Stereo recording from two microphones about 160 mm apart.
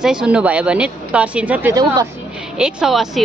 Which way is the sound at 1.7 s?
25° right (ahead or behind).